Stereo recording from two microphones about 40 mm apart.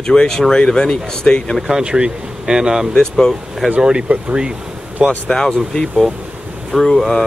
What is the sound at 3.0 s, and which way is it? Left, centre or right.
Speech, centre.